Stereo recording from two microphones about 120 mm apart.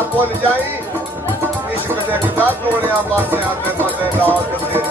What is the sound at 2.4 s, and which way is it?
Speech, 15° right (ahead or behind).